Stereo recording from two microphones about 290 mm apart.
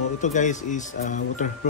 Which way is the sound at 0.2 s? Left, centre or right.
Left.